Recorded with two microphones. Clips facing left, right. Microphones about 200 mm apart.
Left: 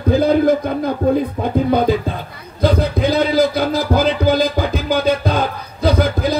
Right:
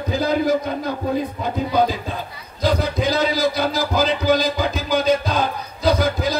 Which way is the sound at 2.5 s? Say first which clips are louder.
Left 4 dB; 55° left (ahead or behind).